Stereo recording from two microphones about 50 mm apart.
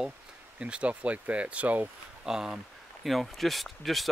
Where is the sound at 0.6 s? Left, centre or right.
Right.